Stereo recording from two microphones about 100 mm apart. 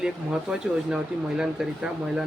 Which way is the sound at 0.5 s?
10° right (ahead or behind).